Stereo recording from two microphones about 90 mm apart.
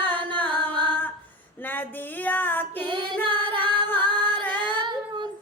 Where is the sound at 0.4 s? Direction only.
60° right (ahead or behind).